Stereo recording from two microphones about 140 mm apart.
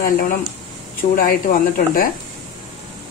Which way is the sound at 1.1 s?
85° left.